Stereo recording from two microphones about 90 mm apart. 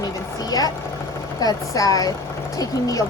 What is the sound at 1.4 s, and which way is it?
Speech, 40° left (ahead or behind).